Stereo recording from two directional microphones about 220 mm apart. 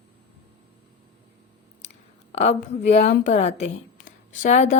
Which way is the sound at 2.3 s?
30° left (ahead or behind).